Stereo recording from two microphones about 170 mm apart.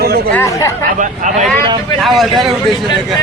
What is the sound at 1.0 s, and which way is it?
Speech, 50° right (ahead or behind).